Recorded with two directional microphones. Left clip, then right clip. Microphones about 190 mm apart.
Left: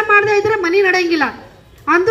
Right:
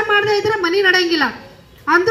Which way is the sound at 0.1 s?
35° right (ahead or behind).